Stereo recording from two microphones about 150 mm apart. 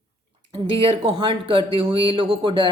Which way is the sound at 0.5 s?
40° right (ahead or behind).